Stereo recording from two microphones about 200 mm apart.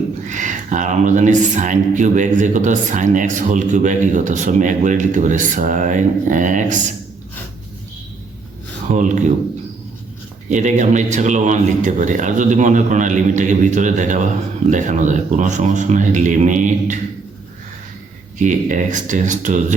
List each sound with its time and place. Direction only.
0.3 s speech: 40° right (ahead or behind)
8.9 s speech: 40° right (ahead or behind)
10.5 s speech: 35° right (ahead or behind)
18.3 s speech: 40° right (ahead or behind)